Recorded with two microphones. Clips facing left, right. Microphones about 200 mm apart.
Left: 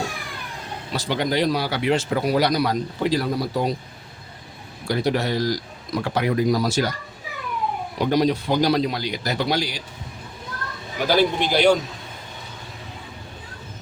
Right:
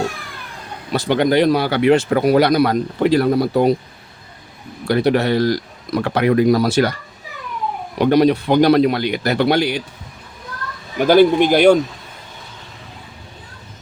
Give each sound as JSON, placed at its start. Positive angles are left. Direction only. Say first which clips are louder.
{"t": 0.9, "sound": "speech", "louder": "right 8 dB", "side_deg": -60}
{"t": 4.9, "sound": "speech", "louder": "right 7 dB", "side_deg": -65}
{"t": 7.9, "sound": "speech", "louder": "right 7 dB", "side_deg": -65}
{"t": 11.1, "sound": "speech", "louder": "right 8 dB", "side_deg": -50}